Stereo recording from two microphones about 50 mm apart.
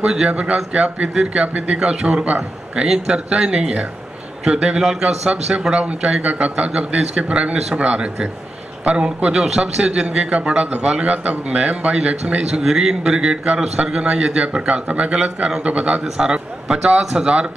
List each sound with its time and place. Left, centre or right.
0.0 s speech: centre
0.3 s a man's voice: right
12.6 s a man's voice: centre